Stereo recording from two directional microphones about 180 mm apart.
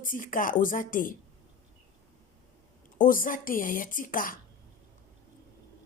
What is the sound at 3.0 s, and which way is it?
Speech, 50° left (ahead or behind).